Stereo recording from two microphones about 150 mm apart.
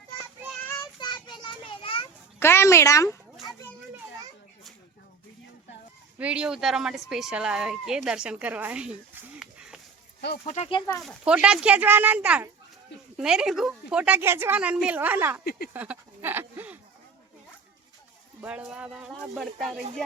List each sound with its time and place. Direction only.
0.9 s children playing: 30° left (ahead or behind)
2.4 s speech: 15° left (ahead or behind)
6.1 s a woman's voice: 10° right (ahead or behind)
9.4 s a sound: 5° right (ahead or behind)
10.2 s speech: 90° left
10.4 s speech: 45° left (ahead or behind)
11.0 s a woman's voice: 5° right (ahead or behind)
15.4 s speech: 90° left
15.7 s a woman's voice: 10° right (ahead or behind)
18.3 s a woman's voice: 10° right (ahead or behind)